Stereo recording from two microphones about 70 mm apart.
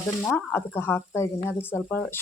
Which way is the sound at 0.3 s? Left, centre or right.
Left.